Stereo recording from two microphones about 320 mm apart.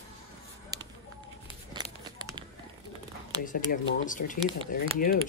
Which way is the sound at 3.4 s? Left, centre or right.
Left.